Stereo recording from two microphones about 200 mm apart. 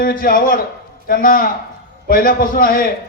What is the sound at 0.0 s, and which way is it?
A man's voice, 45° left (ahead or behind).